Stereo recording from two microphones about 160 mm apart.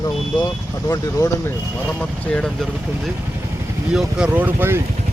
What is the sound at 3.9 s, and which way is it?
Speech, 5° right (ahead or behind).